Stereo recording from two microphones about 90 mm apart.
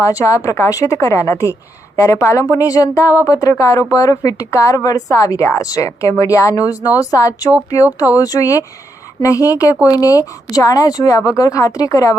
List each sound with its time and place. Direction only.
0.0 s a woman's voice: 40° left (ahead or behind)